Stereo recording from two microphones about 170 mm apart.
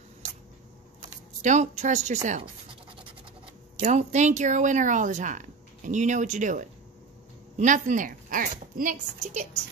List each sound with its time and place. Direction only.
1.4 s a woman's voice: 45° right (ahead or behind)
3.8 s a woman's voice: 45° right (ahead or behind)